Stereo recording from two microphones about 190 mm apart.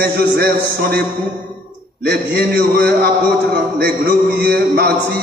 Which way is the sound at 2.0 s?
55° right (ahead or behind).